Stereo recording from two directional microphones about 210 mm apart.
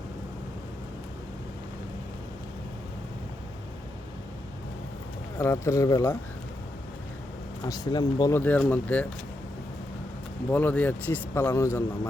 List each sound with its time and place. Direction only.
5.4 s speech: 10° left (ahead or behind)
7.7 s speech: 20° left (ahead or behind)
8.4 s speech: 10° left (ahead or behind)
10.5 s speech: 10° left (ahead or behind)